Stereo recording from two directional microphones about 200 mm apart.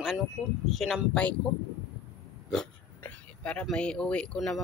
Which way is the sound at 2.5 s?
5° left (ahead or behind).